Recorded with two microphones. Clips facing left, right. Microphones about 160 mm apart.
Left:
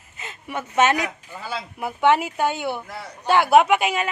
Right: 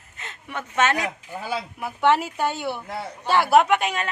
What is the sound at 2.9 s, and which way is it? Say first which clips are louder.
Speech: right 4 dB; 25° right (ahead or behind).